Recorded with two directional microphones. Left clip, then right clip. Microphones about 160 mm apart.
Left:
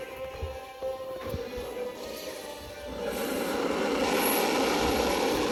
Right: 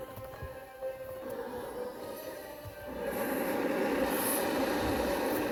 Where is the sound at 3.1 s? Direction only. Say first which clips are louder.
Left 2 dB; 5° right (ahead or behind).